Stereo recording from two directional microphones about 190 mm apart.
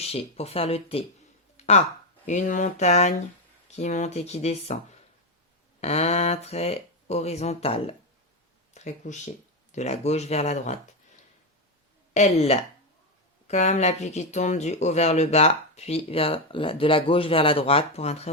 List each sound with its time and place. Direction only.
0.0 s speech: 30° left (ahead or behind)
1.5 s a sound: 35° left (ahead or behind)
2.2 s speech: 40° left (ahead or behind)
12.1 s speech: 35° left (ahead or behind)